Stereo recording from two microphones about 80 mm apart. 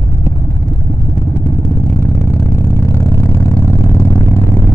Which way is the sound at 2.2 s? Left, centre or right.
Left.